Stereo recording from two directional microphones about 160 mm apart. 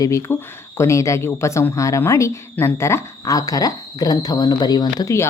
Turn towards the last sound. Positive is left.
turn(degrees=20)  # may be behind; listen again after turning